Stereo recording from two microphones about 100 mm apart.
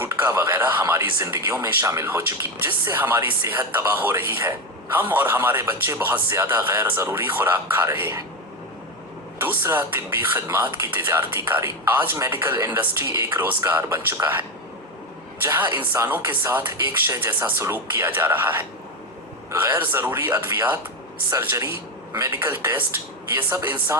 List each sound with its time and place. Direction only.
0.0 s speech: 25° right (ahead or behind)
9.4 s speech: 20° right (ahead or behind)
15.4 s speech: 20° right (ahead or behind)